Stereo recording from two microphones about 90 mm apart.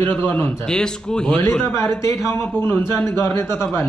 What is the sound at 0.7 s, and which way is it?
Speech, 10° left (ahead or behind).